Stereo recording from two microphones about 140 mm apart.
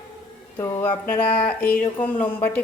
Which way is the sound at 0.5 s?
20° left (ahead or behind).